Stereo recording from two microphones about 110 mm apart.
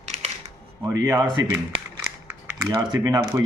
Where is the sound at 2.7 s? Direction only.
35° right (ahead or behind).